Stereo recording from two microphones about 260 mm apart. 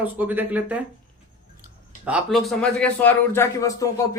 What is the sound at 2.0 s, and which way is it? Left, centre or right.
Speech, centre.